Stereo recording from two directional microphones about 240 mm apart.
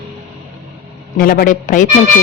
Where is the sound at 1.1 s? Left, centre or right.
Left.